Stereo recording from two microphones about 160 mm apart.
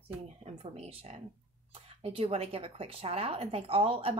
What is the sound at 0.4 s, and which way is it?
Speech, 40° right (ahead or behind).